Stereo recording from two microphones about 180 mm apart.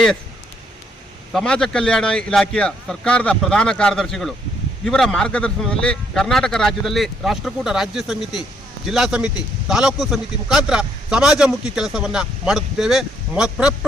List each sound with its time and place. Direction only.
1.3 s a man's voice: 5° left (ahead or behind)